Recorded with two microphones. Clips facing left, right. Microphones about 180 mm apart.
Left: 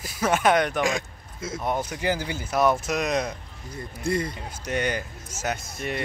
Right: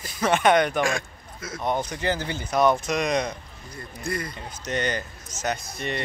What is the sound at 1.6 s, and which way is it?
Speech, 5° left (ahead or behind).